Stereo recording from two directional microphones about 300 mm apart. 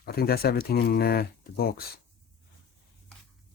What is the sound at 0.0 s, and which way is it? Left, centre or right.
Speech, left.